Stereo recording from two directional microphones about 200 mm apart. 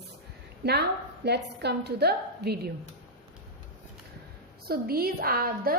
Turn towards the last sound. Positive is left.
turn(degrees=-45)  # may be behind; listen again after turning